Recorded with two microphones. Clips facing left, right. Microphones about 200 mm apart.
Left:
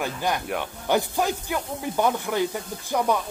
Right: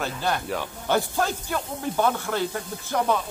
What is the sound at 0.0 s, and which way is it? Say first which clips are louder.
Speech: even; 15° left (ahead or behind).